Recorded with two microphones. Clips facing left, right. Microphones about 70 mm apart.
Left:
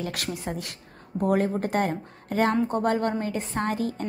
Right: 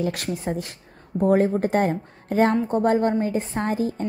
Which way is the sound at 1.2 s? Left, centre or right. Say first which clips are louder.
Right 5 dB; right.